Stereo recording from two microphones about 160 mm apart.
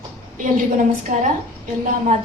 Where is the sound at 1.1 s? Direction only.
55° right (ahead or behind).